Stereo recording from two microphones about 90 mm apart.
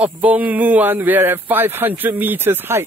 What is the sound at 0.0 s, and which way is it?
Speech, 15° right (ahead or behind).